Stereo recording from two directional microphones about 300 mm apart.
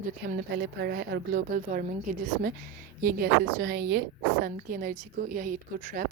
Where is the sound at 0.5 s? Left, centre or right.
Right.